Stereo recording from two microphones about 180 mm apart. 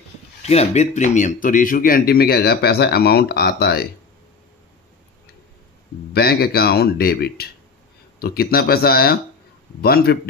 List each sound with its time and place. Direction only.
0.4 s speech: 35° left (ahead or behind); by 3.9 s 60° left (ahead or behind)
6.1 s speech: 60° left (ahead or behind)